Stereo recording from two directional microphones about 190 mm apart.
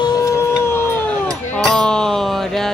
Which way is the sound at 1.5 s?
5° left (ahead or behind).